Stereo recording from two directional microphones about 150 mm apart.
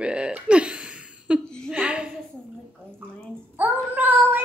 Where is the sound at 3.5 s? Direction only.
10° right (ahead or behind).